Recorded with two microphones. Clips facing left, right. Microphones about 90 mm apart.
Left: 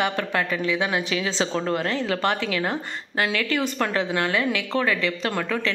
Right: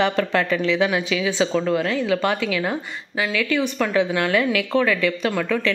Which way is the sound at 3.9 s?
25° left (ahead or behind).